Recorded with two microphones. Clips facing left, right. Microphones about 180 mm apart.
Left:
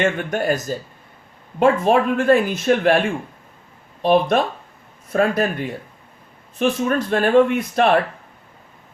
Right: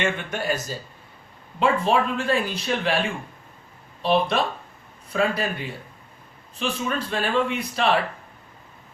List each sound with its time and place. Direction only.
0.0 s a man's voice: 45° left (ahead or behind)